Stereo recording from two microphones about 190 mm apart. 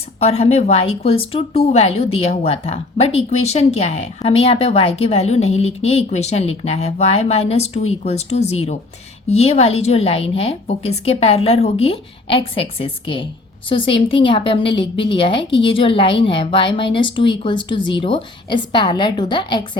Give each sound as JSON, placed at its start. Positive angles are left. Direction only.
{"t": 0.2, "sound": "a woman's voice", "side_deg": 35}